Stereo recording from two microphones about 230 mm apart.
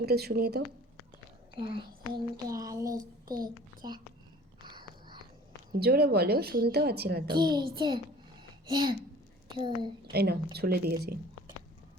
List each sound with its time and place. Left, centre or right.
0.0 s a woman's voice: right
1.5 s a woman's voice: right
2.1 s a sound: centre
5.8 s a woman's voice: right
7.3 s a woman's voice: centre
10.0 s a woman's voice: right